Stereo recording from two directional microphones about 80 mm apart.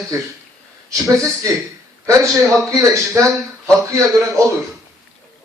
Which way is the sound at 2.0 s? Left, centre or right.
Right.